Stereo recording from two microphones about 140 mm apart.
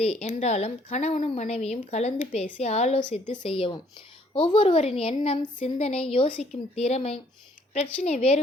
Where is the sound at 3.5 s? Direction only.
40° left (ahead or behind).